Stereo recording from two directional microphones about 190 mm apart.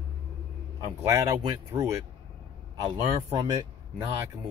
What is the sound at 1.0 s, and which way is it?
Speech, 15° right (ahead or behind).